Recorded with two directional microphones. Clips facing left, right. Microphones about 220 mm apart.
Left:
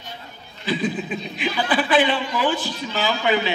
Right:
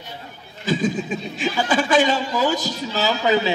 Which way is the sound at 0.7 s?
45° right (ahead or behind).